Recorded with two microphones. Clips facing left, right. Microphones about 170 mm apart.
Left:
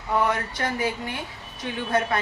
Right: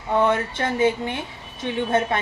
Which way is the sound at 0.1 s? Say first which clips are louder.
Right 4 dB; 25° right (ahead or behind).